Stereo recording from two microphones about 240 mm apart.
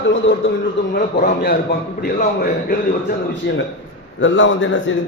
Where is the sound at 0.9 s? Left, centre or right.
Left.